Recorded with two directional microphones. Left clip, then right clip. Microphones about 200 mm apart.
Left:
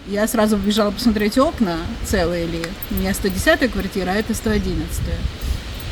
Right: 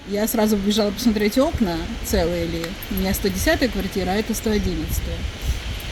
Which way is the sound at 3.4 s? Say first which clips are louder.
Left 5 dB; centre (ahead or behind).